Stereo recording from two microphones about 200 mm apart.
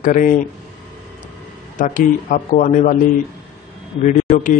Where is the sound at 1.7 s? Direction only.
40° left (ahead or behind).